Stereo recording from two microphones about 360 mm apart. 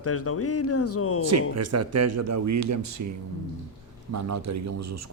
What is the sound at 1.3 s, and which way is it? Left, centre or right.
Speech, right.